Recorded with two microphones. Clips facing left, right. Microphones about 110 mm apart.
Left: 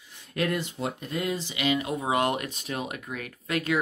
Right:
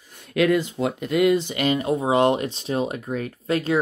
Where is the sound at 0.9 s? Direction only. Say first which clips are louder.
Right 15 dB; 85° right; by 3.7 s 30° right (ahead or behind).